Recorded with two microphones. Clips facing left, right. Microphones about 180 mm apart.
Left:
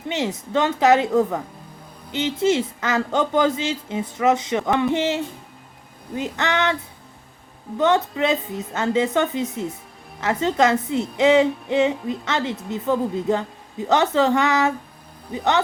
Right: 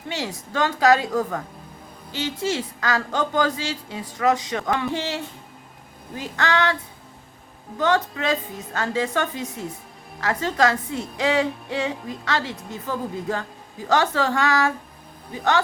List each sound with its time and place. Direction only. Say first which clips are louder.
0.1 s a woman's voice: left 6 dB; 20° left (ahead or behind)
7.8 s a woman's voice: left 3 dB; 25° left (ahead or behind)